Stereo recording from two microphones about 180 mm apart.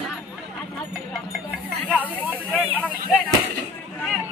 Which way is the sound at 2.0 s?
10° left (ahead or behind).